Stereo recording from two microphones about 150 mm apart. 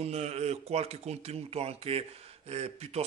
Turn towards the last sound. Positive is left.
turn(degrees=-45)  # may be behind; listen again after turning